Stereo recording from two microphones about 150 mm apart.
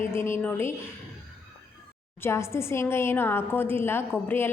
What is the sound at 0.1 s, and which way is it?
Speech, 15° left (ahead or behind).